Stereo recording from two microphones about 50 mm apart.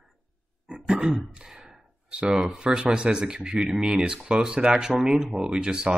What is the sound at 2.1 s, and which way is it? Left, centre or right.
Speech, centre.